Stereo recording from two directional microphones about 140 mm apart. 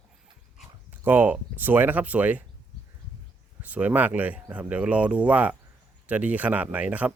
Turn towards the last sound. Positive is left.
turn(degrees=-10)  # may be behind; listen again after turning